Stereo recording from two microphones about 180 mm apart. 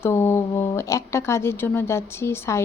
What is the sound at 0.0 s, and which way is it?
Speech, 15° left (ahead or behind).